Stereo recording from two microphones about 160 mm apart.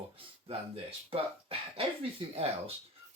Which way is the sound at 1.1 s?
35° right (ahead or behind).